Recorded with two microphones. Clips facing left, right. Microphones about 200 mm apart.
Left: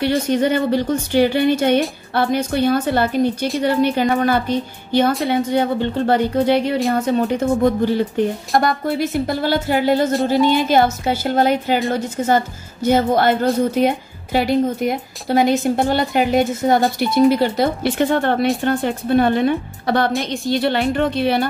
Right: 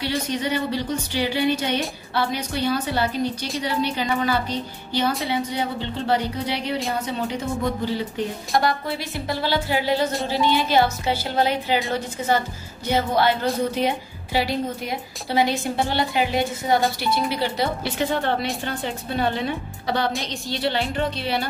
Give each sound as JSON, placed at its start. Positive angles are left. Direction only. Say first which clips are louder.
{"t": 0.3, "sound": "a woman's voice", "louder": "left 9 dB", "side_deg": 50}